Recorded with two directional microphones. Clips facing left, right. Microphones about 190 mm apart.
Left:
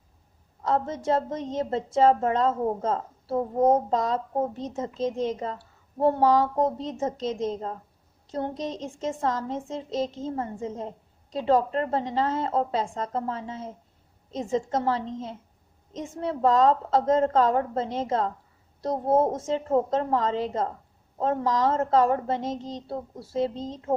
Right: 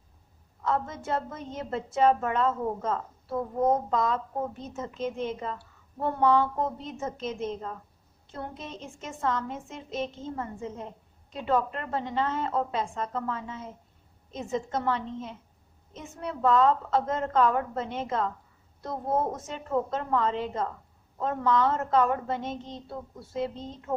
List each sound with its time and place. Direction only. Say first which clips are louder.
0.6 s a woman's voice: left 4 dB; 30° left (ahead or behind)